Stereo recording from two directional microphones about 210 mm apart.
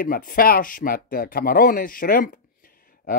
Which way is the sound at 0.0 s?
45° left (ahead or behind).